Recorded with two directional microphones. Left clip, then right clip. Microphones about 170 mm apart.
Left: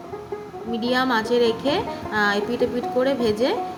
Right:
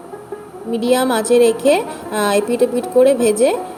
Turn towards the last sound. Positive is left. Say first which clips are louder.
# right 7 dB
turn(degrees=-15)  # may be behind; listen again after turning